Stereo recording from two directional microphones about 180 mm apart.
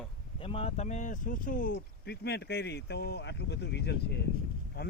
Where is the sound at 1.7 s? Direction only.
65° left (ahead or behind).